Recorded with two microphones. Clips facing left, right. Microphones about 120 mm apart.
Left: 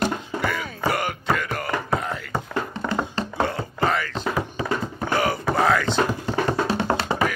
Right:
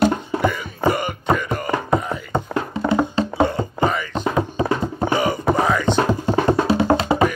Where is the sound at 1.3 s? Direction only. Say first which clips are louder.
Right 5 dB; 5° right (ahead or behind).